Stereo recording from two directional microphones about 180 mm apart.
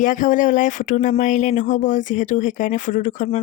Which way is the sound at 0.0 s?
45° left (ahead or behind).